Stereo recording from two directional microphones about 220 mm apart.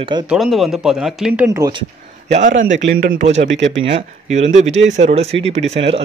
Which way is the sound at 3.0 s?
35° right (ahead or behind).